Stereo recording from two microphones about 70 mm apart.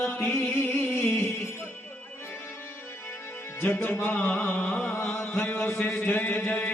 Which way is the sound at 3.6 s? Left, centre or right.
Left.